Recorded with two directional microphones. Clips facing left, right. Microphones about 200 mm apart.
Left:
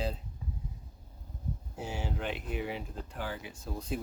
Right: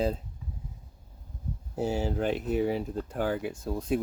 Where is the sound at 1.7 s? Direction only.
40° right (ahead or behind).